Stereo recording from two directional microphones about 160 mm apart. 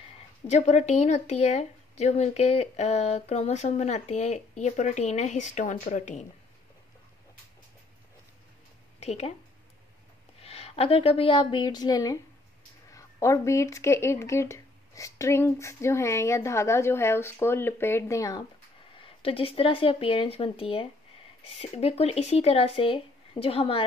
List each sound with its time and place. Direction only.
0.5 s speech: 45° left (ahead or behind)
9.0 s speech: 40° left (ahead or behind)
10.4 s a woman's voice: 40° left (ahead or behind); by 18.4 s 20° left (ahead or behind)
18.9 s speech: 35° left (ahead or behind)